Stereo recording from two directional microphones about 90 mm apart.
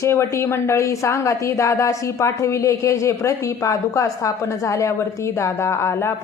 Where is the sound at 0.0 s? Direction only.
30° left (ahead or behind).